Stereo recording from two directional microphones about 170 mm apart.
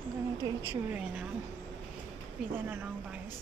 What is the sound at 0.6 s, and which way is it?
Speech, 10° right (ahead or behind).